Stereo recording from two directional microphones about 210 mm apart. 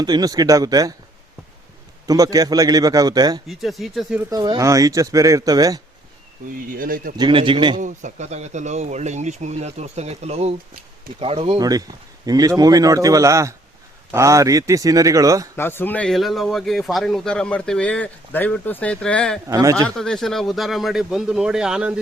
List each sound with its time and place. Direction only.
0.0 s speech: 20° right (ahead or behind)
2.0 s speech: 15° right (ahead or behind)
3.4 s speech: centre (ahead or behind)
4.3 s speech: 15° right (ahead or behind)
6.7 s speech: 40° right (ahead or behind)
7.2 s a man's voice: 25° right (ahead or behind)
7.8 s a man's voice: 35° right (ahead or behind); by 15.4 s 15° right (ahead or behind)
15.5 s speech: 10° left (ahead or behind)
19.5 s speech: 15° right (ahead or behind)
19.7 s speech: 5° left (ahead or behind)